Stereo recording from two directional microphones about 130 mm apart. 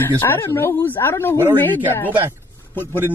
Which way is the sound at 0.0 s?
15° left (ahead or behind).